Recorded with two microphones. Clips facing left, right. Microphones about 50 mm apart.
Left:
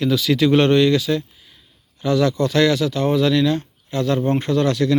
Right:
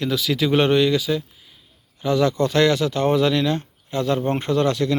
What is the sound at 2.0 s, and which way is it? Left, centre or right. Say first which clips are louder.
A man's voice: left 1 dB; right.